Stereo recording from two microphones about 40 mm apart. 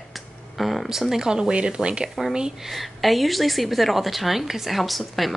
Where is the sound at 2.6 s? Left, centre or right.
Centre.